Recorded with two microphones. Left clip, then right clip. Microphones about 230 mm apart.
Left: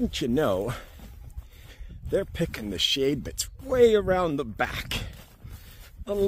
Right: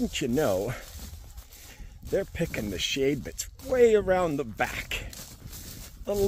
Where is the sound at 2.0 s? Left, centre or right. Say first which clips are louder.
Left 1 dB; centre.